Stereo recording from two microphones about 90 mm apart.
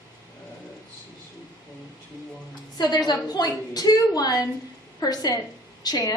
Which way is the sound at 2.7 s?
50° left (ahead or behind).